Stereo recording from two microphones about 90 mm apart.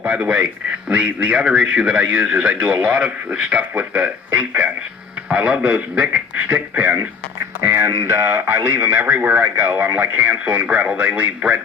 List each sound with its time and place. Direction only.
0.0 s speech: 15° right (ahead or behind)